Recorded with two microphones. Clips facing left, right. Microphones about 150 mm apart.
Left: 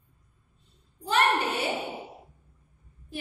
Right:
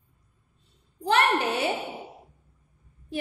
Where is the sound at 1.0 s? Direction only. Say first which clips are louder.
Right 2 dB; 60° right (ahead or behind).